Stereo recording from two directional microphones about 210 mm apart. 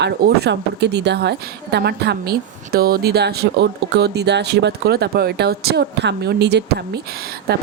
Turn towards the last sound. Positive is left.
turn(degrees=-50)  # may be behind; listen again after turning